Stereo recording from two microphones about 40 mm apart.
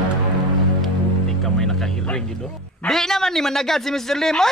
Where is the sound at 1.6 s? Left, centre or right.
Centre.